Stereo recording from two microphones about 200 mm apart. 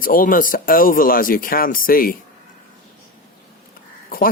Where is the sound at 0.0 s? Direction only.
45° left (ahead or behind).